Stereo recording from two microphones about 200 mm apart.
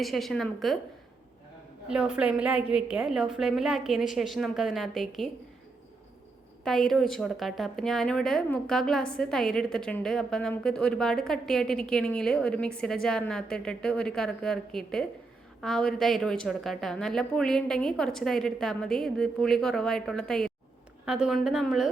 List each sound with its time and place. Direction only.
0.0 s a woman's voice: centre (ahead or behind)
1.9 s a woman's voice: 5° right (ahead or behind)
6.7 s a woman's voice: centre (ahead or behind)